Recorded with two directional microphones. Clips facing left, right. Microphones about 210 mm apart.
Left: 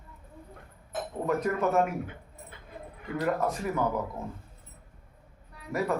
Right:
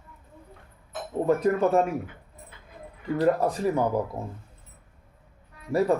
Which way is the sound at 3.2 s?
30° right (ahead or behind).